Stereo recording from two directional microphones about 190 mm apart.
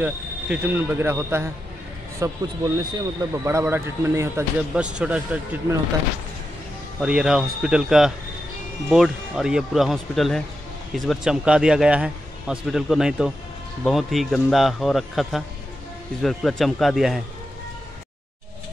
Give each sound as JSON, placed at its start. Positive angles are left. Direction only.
{"t": 0.0, "sound": "speech", "side_deg": -10}
{"t": 7.0, "sound": "speech", "side_deg": -5}